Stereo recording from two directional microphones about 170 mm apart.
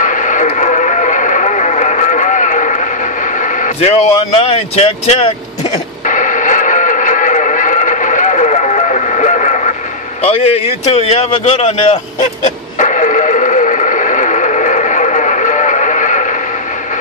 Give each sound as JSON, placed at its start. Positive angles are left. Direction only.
{"t": 0.0, "sound": "radio", "side_deg": 50}
{"t": 4.4, "sound": "vehicle", "side_deg": 35}
{"t": 10.2, "sound": "a sound", "side_deg": 35}